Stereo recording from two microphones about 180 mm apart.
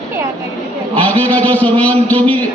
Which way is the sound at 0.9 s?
10° left (ahead or behind).